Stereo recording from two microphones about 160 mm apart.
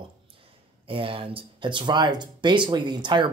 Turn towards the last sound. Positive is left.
turn(degrees=-30)  # may be behind; listen again after turning